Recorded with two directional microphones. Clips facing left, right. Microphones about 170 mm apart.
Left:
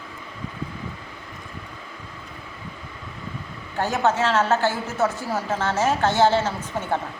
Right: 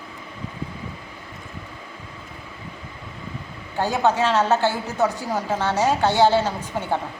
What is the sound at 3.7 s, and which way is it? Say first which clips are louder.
A woman's voice: right 1 dB; 15° right (ahead or behind).